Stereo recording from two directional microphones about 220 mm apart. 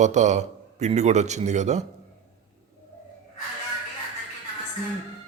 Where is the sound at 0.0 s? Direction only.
30° right (ahead or behind).